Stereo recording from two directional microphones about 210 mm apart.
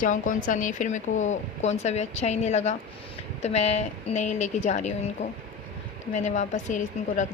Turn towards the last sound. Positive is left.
turn(degrees=35)  # may be behind; listen again after turning